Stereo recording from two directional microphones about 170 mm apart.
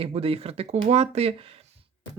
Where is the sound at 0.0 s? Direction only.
35° right (ahead or behind).